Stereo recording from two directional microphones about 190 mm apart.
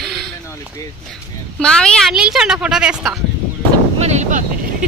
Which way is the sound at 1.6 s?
5° left (ahead or behind).